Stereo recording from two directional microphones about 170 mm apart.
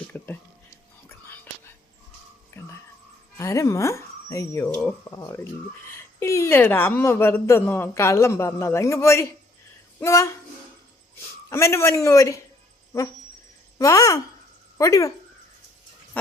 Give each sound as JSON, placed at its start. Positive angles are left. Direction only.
{"t": 0.1, "sound": "speech", "side_deg": 10}
{"t": 1.0, "sound": "whispering", "side_deg": 10}
{"t": 2.6, "sound": "music", "side_deg": 15}
{"t": 3.3, "sound": "speech", "side_deg": 20}
{"t": 11.4, "sound": "speech", "side_deg": 15}
{"t": 13.7, "sound": "speech", "side_deg": 20}